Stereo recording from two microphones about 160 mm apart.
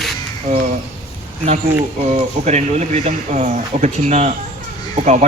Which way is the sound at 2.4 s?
45° right (ahead or behind).